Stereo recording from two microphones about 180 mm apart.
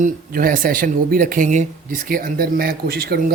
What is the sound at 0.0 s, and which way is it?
Speech, 50° right (ahead or behind).